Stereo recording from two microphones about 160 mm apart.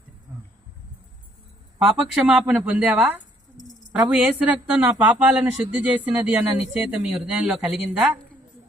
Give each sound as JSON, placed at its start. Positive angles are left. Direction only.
{"t": 2.0, "sound": "speech", "side_deg": -5}